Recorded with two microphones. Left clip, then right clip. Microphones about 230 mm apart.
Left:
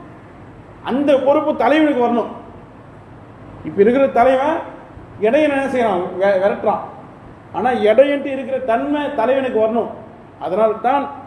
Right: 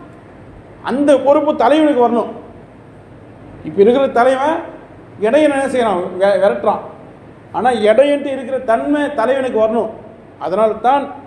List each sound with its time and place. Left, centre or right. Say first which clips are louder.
0.9 s a man's voice: right 3 dB; right
3.8 s a man's voice: right 2 dB; centre